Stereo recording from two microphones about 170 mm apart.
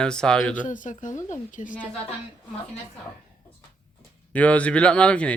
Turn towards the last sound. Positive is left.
turn(degrees=5)  # may be behind; listen again after turning